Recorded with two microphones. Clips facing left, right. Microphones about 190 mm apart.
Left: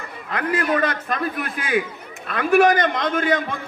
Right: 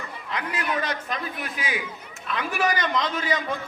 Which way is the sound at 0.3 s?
55° left (ahead or behind).